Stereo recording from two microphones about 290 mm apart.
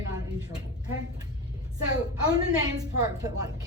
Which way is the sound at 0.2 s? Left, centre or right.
Centre.